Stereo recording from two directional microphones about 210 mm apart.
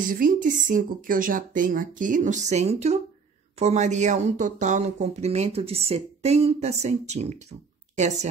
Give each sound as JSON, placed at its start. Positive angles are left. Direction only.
{"t": 0.1, "sound": "speech", "side_deg": -40}